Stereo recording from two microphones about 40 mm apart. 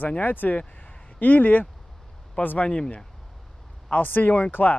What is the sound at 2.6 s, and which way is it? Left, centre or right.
Speech, left.